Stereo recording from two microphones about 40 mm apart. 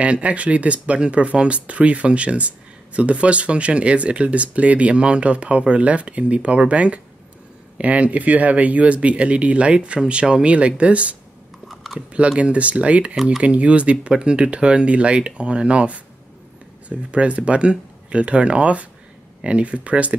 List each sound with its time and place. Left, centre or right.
0.0 s speech: right
11.6 s typing: centre
12.3 s speech: right
13.1 s speech: centre
13.4 s speech: right